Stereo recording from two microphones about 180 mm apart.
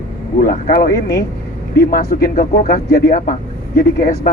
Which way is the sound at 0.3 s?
50° left (ahead or behind).